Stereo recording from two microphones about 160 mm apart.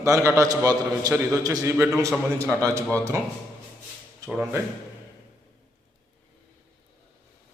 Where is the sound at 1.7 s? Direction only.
5° right (ahead or behind).